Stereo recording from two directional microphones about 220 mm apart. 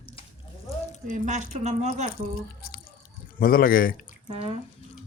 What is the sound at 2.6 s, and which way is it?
Drip, 40° left (ahead or behind).